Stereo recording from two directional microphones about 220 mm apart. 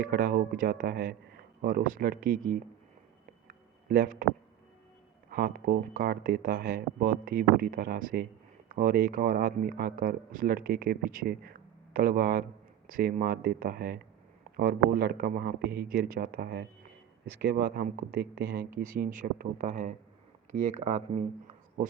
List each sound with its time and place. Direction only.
0.0 s speech: 40° right (ahead or behind)
3.4 s a sound: 40° right (ahead or behind)
5.3 s speech: 45° right (ahead or behind)